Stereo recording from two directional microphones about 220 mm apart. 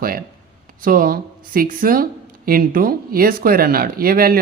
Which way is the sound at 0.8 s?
40° right (ahead or behind).